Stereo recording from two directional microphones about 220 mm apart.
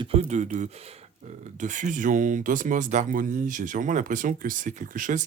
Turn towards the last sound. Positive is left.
turn(degrees=-35)  # may be behind; listen again after turning